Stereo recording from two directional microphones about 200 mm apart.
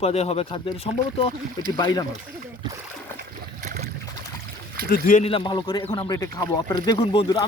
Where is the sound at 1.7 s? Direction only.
20° left (ahead or behind).